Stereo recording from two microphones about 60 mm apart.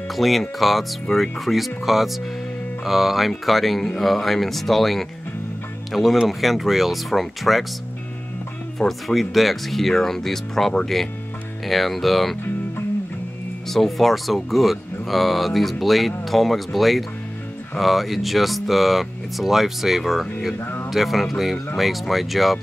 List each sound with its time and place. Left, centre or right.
0.1 s speech: centre
8.7 s speech: centre
13.7 s speech: centre
20.5 s speech: left
20.9 s speech: centre